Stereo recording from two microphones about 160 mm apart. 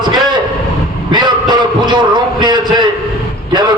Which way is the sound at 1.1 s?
25° right (ahead or behind).